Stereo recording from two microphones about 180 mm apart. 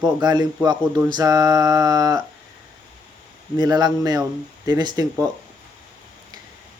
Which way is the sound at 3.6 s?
20° right (ahead or behind).